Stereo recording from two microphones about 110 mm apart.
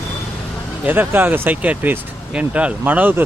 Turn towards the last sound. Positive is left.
turn(degrees=-15)  # may be behind; listen again after turning